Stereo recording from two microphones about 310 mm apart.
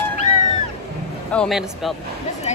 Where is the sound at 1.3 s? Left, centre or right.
Centre.